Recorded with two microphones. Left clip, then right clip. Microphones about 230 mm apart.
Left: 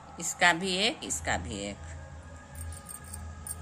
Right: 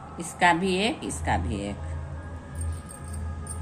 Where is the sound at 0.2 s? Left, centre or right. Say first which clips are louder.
Right 3 dB; left.